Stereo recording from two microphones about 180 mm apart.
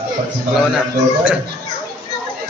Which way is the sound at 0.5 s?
5° right (ahead or behind).